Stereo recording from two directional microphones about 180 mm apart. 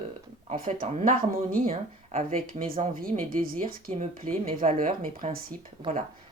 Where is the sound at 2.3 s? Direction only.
50° right (ahead or behind).